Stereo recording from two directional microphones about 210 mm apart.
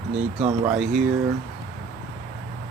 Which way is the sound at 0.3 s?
35° right (ahead or behind).